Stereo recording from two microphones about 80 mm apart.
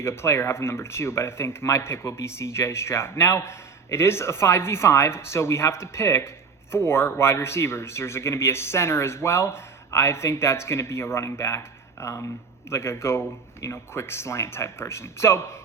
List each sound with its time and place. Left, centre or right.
0.0 s speech: left